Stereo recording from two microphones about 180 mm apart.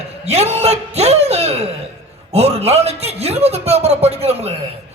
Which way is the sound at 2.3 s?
35° right (ahead or behind).